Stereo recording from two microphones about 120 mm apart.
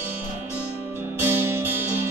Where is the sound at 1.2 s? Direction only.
15° right (ahead or behind).